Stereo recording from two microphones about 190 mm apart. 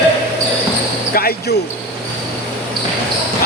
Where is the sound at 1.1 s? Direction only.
50° left (ahead or behind).